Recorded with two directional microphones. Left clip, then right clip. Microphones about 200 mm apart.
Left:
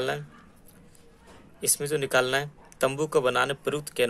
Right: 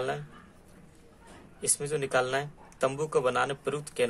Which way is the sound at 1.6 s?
20° left (ahead or behind).